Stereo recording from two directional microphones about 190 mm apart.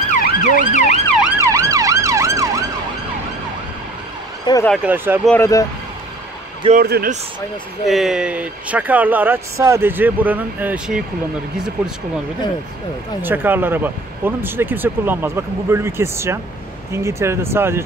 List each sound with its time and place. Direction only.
0.1 s emergency vehicle: 45° left (ahead or behind)
1.4 s emergency vehicle: 15° right (ahead or behind)
4.5 s speech: 20° left (ahead or behind)
4.8 s speech: 10° right (ahead or behind)
5.2 s speech: 10° left (ahead or behind)
6.7 s a man's voice: 50° right (ahead or behind)
7.8 s speech: centre (ahead or behind)
13.2 s speech: 10° right (ahead or behind)